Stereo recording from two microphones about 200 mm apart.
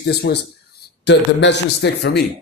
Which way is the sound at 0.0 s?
55° left (ahead or behind).